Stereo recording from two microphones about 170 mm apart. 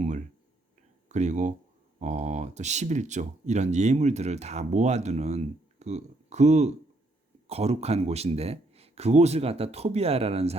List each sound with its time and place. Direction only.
1.0 s speech: 45° right (ahead or behind)